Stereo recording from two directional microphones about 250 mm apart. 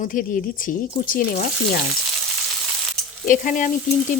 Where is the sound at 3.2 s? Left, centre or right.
Left.